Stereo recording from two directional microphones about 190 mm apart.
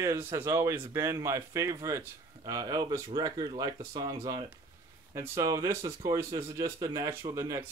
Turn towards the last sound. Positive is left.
turn(degrees=-15)  # may be behind; listen again after turning